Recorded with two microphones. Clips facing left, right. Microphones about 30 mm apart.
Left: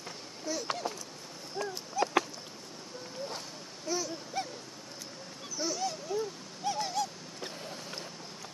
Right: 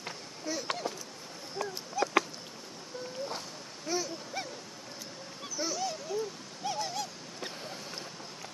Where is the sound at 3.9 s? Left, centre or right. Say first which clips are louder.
Even; centre.